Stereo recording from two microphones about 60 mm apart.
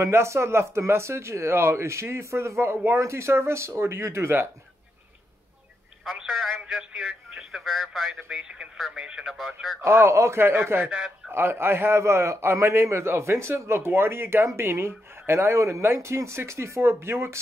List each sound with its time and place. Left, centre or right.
0.1 s a man's voice: right
7.0 s speech: centre
8.3 s speech: centre
9.8 s a man's voice: right